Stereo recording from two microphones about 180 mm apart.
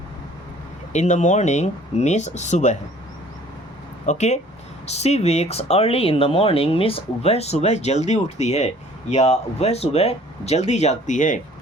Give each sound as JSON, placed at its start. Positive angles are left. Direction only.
{"t": 0.9, "sound": "speech", "side_deg": 40}
{"t": 4.0, "sound": "speech", "side_deg": 40}